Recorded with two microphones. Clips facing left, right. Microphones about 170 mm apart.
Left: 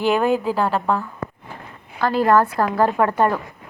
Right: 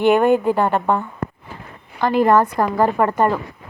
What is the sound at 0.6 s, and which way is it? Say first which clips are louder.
A woman's voice: right 2 dB; 20° right (ahead or behind).